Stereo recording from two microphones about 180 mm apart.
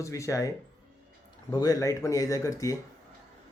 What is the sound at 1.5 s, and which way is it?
Speech, 20° left (ahead or behind).